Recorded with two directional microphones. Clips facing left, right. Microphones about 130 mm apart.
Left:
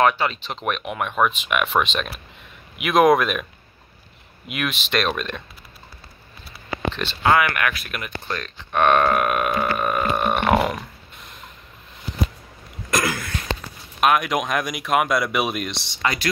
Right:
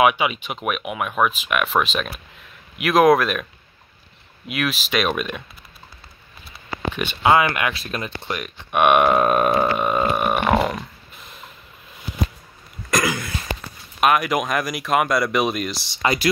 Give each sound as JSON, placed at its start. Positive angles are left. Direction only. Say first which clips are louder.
{"t": 0.0, "sound": "speech", "louder": "right 1 dB", "side_deg": -10}
{"t": 4.5, "sound": "speech", "louder": "right 2 dB", "side_deg": 0}
{"t": 6.9, "sound": "speech", "louder": "right 2 dB", "side_deg": -10}
{"t": 7.3, "sound": "speech", "louder": "right 1 dB", "side_deg": -25}
{"t": 7.8, "sound": "burping", "louder": "right 4 dB", "side_deg": -30}
{"t": 8.3, "sound": "speech", "louder": "right 1 dB", "side_deg": -15}
{"t": 9.2, "sound": "burping", "louder": "right 4 dB", "side_deg": -30}
{"t": 9.8, "sound": "speech", "louder": "right 2 dB", "side_deg": -20}
{"t": 10.1, "sound": "burping", "louder": "even", "side_deg": -5}
{"t": 12.9, "sound": "a sound", "louder": "right 1 dB", "side_deg": 0}
{"t": 14.0, "sound": "speech", "louder": "right 1 dB", "side_deg": 0}